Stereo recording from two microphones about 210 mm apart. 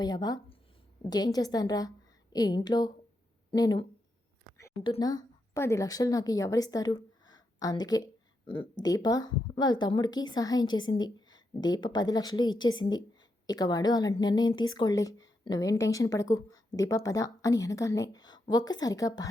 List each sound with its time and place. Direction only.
0.0 s a woman's voice: 20° left (ahead or behind)